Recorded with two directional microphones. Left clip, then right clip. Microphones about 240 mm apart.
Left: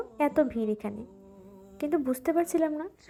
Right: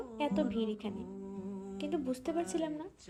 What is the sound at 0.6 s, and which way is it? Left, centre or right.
Speech, left.